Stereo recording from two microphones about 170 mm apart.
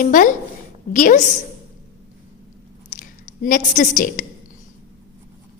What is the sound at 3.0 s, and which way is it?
A woman's voice, 55° left (ahead or behind).